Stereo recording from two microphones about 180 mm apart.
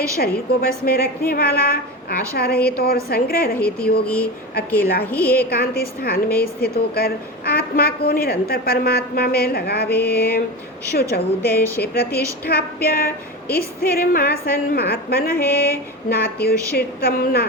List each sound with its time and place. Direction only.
0.2 s a woman's voice: 60° left (ahead or behind)
4.0 s a woman's voice: 5° left (ahead or behind)
4.8 s a woman's voice: 60° left (ahead or behind)
5.0 s a woman's voice: 10° left (ahead or behind)
5.5 s a woman's voice: 60° left (ahead or behind)
11.8 s a woman's voice: 60° left (ahead or behind)